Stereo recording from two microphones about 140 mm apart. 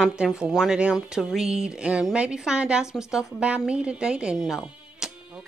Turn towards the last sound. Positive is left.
turn(degrees=-5)  # may be behind; listen again after turning